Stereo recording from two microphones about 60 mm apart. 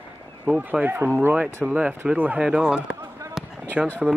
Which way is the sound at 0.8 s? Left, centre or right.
Right.